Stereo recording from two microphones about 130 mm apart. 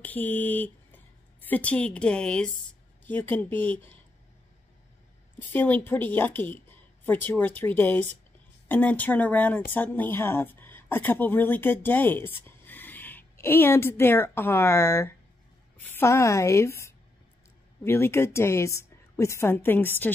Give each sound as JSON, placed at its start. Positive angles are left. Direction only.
{"t": 0.0, "sound": "speech", "side_deg": 15}
{"t": 5.5, "sound": "a woman's voice", "side_deg": 15}